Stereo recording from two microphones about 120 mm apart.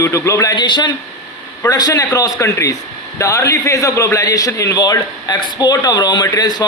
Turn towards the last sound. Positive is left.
turn(degrees=35)  # may be behind; listen again after turning